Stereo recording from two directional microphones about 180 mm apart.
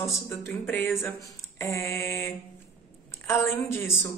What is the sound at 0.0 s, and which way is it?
A man's voice, 15° left (ahead or behind).